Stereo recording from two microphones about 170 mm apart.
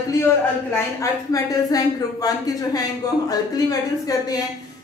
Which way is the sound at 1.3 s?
20° left (ahead or behind).